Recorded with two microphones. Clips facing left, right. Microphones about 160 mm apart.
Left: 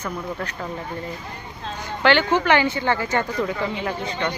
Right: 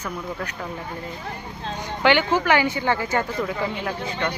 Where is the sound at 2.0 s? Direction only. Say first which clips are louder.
Left 1 dB; 10° right (ahead or behind).